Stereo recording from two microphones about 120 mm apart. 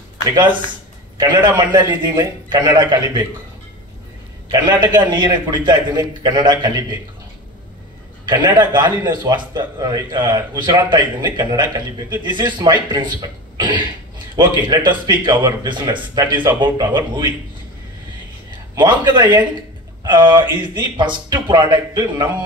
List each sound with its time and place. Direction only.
0.3 s a man's voice: 40° right (ahead or behind)
4.5 s a man's voice: 40° right (ahead or behind)
8.3 s a man's voice: 40° right (ahead or behind)
18.8 s a man's voice: 40° right (ahead or behind)